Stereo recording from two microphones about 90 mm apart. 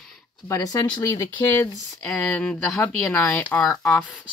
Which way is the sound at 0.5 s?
40° left (ahead or behind).